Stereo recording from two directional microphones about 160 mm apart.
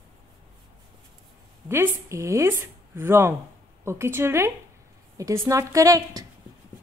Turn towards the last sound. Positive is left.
turn(degrees=-20)  # may be behind; listen again after turning